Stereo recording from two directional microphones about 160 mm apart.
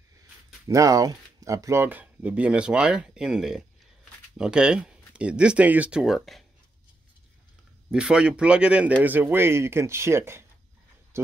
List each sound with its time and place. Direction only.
0.7 s speech: 20° right (ahead or behind); by 6.4 s centre (ahead or behind)
7.9 s speech: 5° right (ahead or behind)